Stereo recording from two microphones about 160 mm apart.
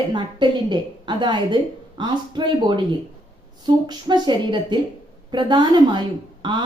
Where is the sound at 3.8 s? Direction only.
25° right (ahead or behind).